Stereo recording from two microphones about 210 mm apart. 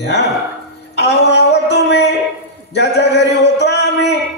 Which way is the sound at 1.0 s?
55° left (ahead or behind).